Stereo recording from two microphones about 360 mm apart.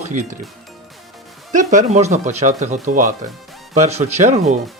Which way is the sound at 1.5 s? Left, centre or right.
Centre.